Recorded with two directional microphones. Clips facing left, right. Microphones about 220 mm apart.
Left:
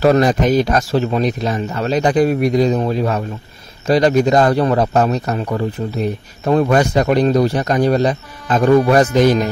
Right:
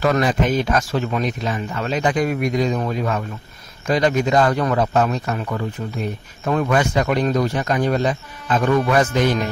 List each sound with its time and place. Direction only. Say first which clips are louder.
0.0 s speech: left 5 dB; 35° left (ahead or behind)